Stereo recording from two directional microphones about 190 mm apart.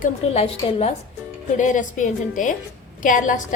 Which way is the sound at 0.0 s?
30° left (ahead or behind).